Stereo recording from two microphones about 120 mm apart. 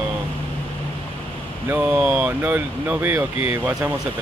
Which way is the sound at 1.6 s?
15° right (ahead or behind).